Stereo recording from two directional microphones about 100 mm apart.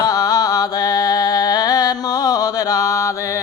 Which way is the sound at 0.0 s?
40° left (ahead or behind).